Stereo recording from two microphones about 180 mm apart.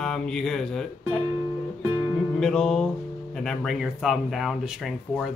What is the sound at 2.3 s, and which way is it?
Music, centre (ahead or behind).